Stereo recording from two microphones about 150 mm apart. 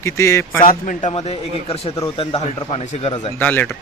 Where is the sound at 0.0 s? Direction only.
20° left (ahead or behind).